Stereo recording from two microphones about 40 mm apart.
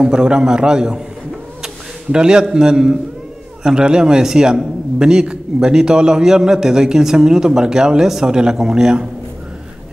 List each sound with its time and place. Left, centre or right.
0.0 s a man's voice: centre
2.1 s a man's voice: centre